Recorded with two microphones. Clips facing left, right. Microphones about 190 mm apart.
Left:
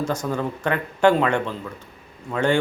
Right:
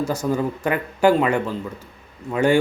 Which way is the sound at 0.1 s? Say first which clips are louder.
Right 3 dB; 10° right (ahead or behind).